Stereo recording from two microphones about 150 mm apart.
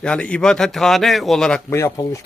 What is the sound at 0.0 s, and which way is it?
Speech, 5° left (ahead or behind).